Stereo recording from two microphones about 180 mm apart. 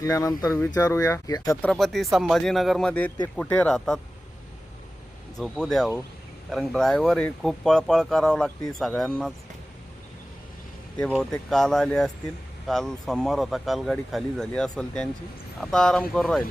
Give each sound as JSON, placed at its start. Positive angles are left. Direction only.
{"t": 0.0, "sound": "speech", "side_deg": 20}
{"t": 1.6, "sound": "speech", "side_deg": 0}
{"t": 5.4, "sound": "speech", "side_deg": 0}
{"t": 11.2, "sound": "speech", "side_deg": 5}